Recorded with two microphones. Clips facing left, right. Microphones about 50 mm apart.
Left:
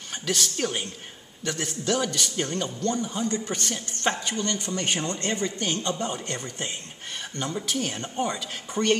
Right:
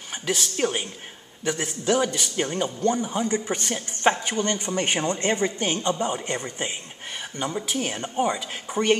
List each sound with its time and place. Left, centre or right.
0.3 s a man's voice: centre